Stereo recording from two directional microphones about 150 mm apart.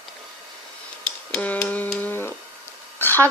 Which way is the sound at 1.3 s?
10° left (ahead or behind).